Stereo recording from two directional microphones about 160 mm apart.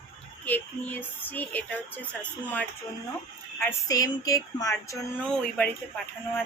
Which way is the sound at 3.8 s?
20° left (ahead or behind).